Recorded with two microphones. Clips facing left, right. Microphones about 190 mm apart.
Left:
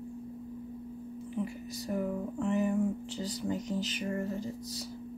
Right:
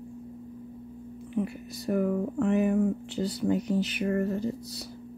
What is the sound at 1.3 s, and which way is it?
Speech, 65° right (ahead or behind).